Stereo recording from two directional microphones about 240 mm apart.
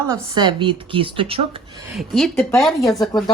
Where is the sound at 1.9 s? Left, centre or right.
Centre.